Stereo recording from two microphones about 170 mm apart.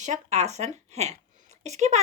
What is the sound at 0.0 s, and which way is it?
A woman's voice, 45° right (ahead or behind).